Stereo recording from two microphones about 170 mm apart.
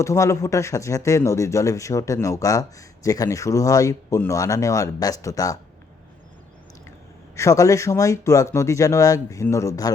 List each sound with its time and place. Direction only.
0.0 s speech: 15° left (ahead or behind)
7.3 s speech: 15° left (ahead or behind)